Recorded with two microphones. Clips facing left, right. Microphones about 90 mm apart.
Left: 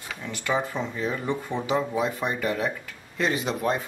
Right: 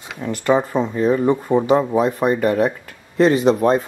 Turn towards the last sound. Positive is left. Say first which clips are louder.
# right 11 dB
turn(degrees=-35)  # may be behind; listen again after turning